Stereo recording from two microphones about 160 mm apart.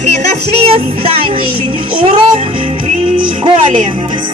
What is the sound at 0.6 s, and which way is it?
Music, 40° right (ahead or behind).